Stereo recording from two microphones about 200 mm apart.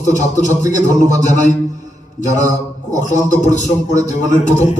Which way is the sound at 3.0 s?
35° left (ahead or behind).